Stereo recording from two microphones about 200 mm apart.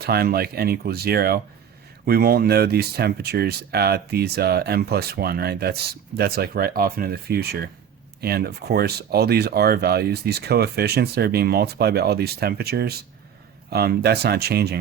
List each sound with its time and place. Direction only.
0.0 s speech: 50° right (ahead or behind)